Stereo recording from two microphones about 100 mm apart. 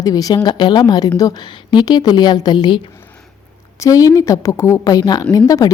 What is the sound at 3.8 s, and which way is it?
Speech, 35° left (ahead or behind).